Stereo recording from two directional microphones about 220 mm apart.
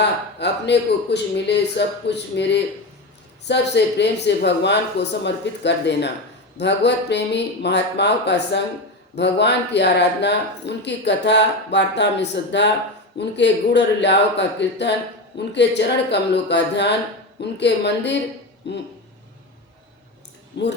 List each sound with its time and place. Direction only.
0.0 s speech: 50° left (ahead or behind)
20.6 s speech: 50° left (ahead or behind)